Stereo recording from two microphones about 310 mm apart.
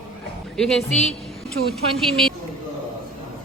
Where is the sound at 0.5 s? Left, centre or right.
Centre.